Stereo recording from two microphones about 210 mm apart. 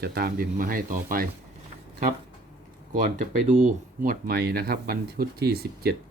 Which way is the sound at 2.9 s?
35° right (ahead or behind).